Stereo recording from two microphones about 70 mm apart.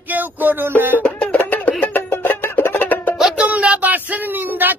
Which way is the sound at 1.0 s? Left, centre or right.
Centre.